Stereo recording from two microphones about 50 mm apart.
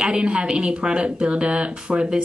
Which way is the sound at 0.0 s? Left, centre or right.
Centre.